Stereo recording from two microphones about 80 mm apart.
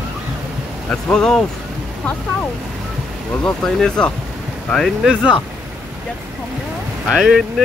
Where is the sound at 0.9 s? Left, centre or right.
Centre.